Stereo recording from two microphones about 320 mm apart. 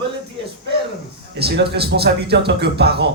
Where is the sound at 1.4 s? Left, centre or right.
Right.